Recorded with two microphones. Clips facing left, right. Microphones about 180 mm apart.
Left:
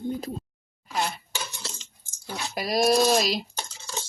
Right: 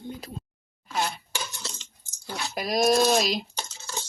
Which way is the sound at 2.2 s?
5° left (ahead or behind).